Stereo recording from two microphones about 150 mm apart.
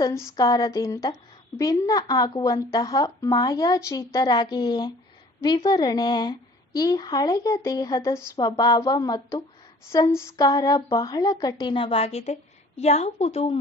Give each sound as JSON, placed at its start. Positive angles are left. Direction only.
{"t": 0.0, "sound": "a woman's voice", "side_deg": 25}